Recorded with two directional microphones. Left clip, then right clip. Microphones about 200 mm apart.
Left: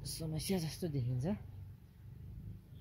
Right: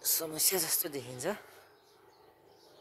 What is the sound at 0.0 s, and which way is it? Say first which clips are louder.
Speech: right 11 dB; 10° right (ahead or behind).